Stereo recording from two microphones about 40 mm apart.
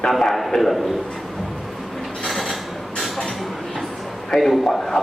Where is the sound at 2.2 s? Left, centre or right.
Centre.